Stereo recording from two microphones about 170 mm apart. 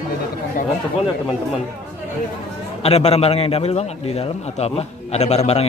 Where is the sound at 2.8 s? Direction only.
35° left (ahead or behind).